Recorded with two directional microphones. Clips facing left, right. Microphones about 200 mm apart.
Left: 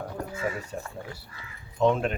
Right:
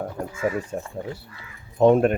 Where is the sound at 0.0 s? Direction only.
50° right (ahead or behind).